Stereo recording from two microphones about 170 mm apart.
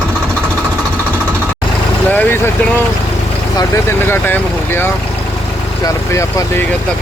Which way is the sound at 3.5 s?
15° left (ahead or behind).